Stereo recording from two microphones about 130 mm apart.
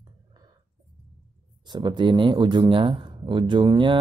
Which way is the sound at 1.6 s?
35° right (ahead or behind).